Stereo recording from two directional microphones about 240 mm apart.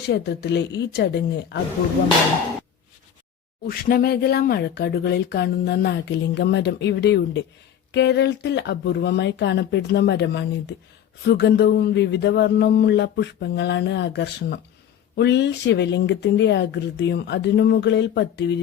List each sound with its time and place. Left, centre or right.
0.1 s speech: left
3.7 s speech: left